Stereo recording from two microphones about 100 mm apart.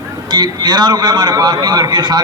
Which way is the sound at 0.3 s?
50° right (ahead or behind).